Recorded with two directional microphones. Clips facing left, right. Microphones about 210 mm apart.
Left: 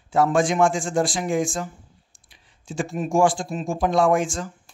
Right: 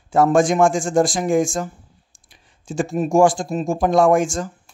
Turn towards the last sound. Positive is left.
turn(degrees=-45)  # may be behind; listen again after turning